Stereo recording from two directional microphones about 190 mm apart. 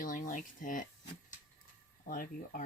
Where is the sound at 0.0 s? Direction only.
45° left (ahead or behind).